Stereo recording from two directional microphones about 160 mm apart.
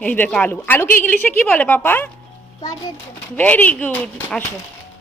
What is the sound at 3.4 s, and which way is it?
A woman's voice, 10° left (ahead or behind).